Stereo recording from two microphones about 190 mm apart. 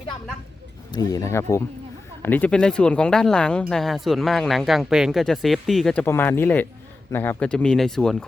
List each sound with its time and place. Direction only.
0.9 s speech: 15° left (ahead or behind)